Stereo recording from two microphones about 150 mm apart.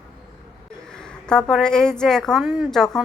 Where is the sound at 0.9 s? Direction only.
5° left (ahead or behind).